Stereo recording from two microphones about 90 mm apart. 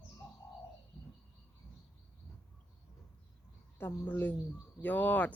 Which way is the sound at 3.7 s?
25° left (ahead or behind).